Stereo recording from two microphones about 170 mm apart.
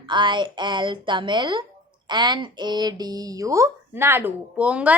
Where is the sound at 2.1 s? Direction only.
25° right (ahead or behind).